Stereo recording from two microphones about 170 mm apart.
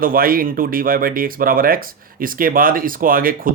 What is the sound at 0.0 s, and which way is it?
Speech, 60° right (ahead or behind).